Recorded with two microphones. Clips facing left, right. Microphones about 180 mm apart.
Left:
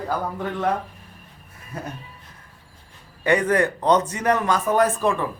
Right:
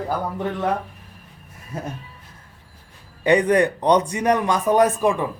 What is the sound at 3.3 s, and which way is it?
A man's voice, 15° right (ahead or behind).